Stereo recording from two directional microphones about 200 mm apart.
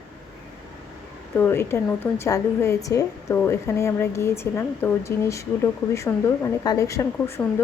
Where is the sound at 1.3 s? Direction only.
10° left (ahead or behind).